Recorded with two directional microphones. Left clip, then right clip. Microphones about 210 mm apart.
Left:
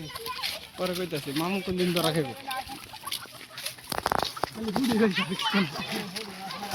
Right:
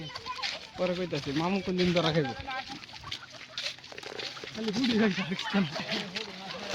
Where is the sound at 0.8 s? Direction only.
45° right (ahead or behind).